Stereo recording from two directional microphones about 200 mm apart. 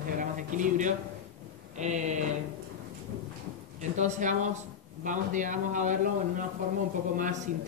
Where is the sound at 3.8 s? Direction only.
35° right (ahead or behind).